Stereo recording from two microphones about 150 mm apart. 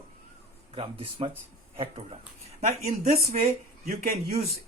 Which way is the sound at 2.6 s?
50° right (ahead or behind).